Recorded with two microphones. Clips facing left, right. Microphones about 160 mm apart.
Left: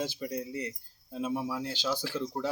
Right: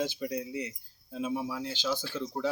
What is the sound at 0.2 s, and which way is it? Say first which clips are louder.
Speech: right 1 dB; 5° right (ahead or behind).